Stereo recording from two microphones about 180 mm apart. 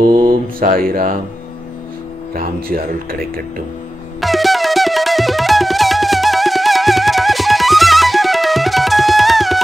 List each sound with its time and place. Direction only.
0.0 s mantra: 50° right (ahead or behind)
2.3 s speech: 50° right (ahead or behind)
4.2 s music: centre (ahead or behind)